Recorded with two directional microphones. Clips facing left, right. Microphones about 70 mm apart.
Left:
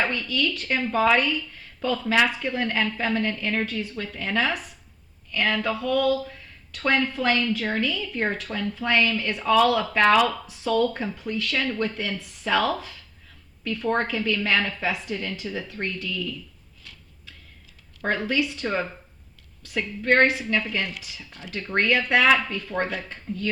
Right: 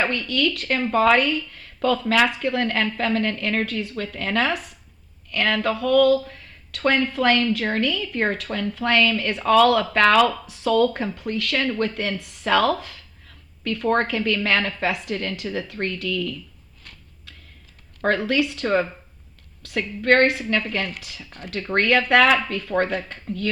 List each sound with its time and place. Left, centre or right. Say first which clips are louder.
0.0 s speech: right 3 dB; right
0.8 s a woman's voice: right 3 dB; right
18.0 s a woman's voice: right 4 dB; right
21.7 s a woman's voice: right 3 dB; right
23.0 s speech: right 2 dB; right